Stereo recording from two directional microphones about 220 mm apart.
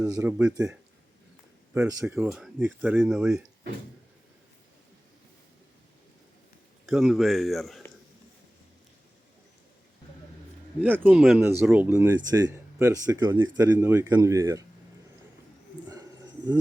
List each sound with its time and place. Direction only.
0.0 s speech: 10° right (ahead or behind)
2.1 s speech: centre (ahead or behind)
6.8 s speech: centre (ahead or behind)
10.8 s speech: 10° right (ahead or behind)